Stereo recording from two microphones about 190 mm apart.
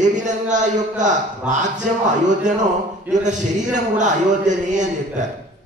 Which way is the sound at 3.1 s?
40° right (ahead or behind).